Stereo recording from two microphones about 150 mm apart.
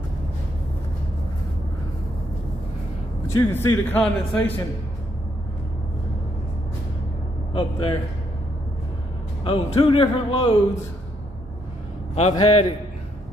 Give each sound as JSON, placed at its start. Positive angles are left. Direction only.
{"t": 3.3, "sound": "speech", "side_deg": 15}
{"t": 7.5, "sound": "speech", "side_deg": 35}
{"t": 9.4, "sound": "speech", "side_deg": 35}
{"t": 12.2, "sound": "a man's voice", "side_deg": 40}